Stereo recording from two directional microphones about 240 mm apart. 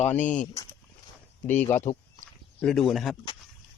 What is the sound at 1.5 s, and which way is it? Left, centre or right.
Speech, centre.